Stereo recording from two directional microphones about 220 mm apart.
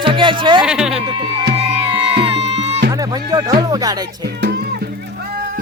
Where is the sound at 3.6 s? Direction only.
15° right (ahead or behind).